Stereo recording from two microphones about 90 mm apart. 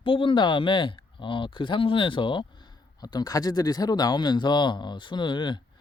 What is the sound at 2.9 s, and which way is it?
Speech, 45° left (ahead or behind).